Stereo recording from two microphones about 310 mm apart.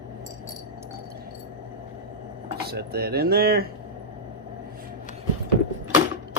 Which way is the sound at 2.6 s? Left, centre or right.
Right.